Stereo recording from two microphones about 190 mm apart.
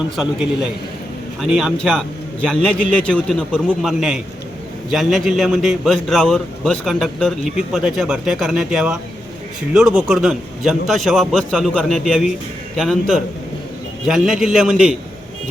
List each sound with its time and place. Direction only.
0.2 s a man's voice: 5° right (ahead or behind)